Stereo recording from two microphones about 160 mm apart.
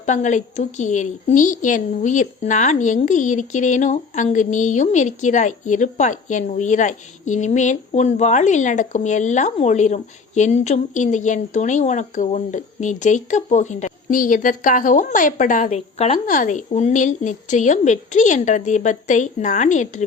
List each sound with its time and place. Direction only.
0.0 s a woman's voice: 50° left (ahead or behind)
16.1 s a woman's voice: 55° left (ahead or behind)